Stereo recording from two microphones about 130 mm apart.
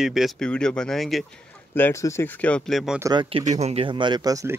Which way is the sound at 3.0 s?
30° right (ahead or behind).